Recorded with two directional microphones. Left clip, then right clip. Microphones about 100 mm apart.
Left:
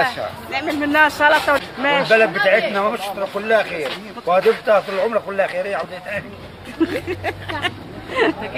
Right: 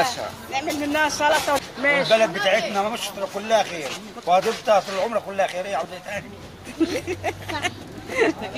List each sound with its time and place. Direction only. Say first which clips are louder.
0.0 s speech: left 3 dB; 5° left (ahead or behind)
2.1 s speech: left 4 dB; 25° left (ahead or behind)
6.8 s speech: left 3 dB; 5° right (ahead or behind)